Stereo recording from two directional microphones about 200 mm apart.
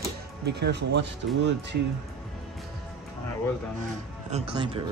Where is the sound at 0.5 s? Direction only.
60° right (ahead or behind).